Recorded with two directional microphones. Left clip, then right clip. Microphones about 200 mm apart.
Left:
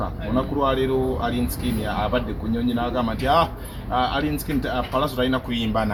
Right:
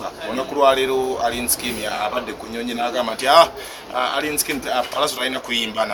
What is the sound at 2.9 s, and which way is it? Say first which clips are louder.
Speech: right 7 dB; centre (ahead or behind).